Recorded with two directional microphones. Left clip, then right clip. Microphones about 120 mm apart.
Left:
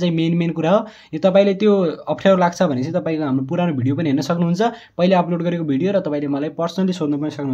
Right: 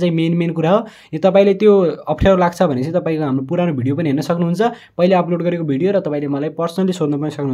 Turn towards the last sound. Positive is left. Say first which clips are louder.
# right 3 dB
turn(degrees=-40)  # may be behind; listen again after turning